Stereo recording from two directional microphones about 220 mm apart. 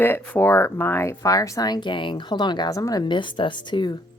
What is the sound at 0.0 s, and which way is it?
Speech, 10° left (ahead or behind).